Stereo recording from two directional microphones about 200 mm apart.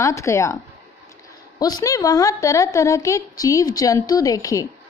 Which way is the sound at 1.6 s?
20° left (ahead or behind).